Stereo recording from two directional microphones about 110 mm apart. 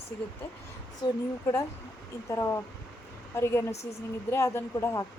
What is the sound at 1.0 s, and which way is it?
Speech, 40° left (ahead or behind).